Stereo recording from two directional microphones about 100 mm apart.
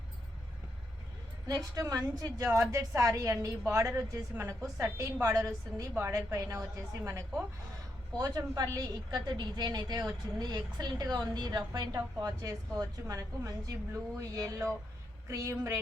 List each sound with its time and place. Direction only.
1.5 s a woman's voice: 35° right (ahead or behind)